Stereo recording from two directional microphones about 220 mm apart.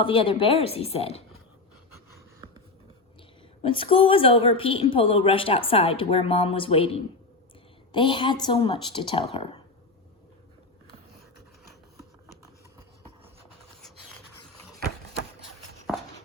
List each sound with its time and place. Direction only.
0.0 s a woman's voice: 25° left (ahead or behind)
3.6 s a woman's voice: 25° left (ahead or behind)